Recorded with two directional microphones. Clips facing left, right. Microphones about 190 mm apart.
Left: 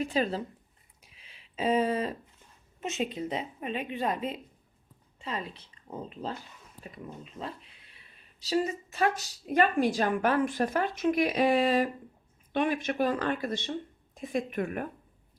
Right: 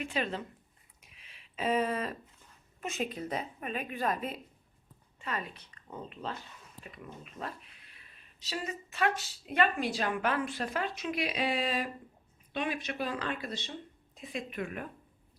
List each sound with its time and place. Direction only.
0.0 s speech: 35° left (ahead or behind)
1.0 s a sound: 30° left (ahead or behind)
2.8 s a woman's voice: 25° left (ahead or behind); by 14.8 s 50° left (ahead or behind)